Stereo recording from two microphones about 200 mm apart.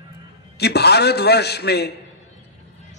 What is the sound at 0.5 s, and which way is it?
A man's voice, 55° left (ahead or behind).